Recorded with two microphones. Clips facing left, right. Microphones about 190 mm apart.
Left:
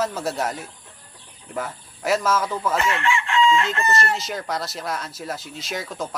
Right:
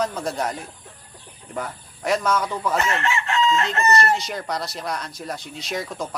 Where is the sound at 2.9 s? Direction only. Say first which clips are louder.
Left 1 dB; 40° right (ahead or behind).